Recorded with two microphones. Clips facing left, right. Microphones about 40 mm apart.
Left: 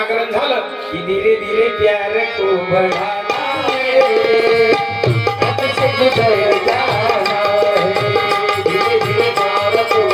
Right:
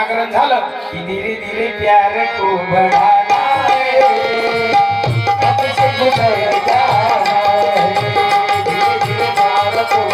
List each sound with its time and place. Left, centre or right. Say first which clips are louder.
2.7 s tabla: right 6 dB; centre
6.8 s music: right 3 dB; left
8.3 s tabla: right 1 dB; left
9.4 s music: right 2 dB; left